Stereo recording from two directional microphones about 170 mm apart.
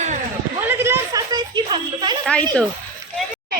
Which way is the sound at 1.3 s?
25° right (ahead or behind).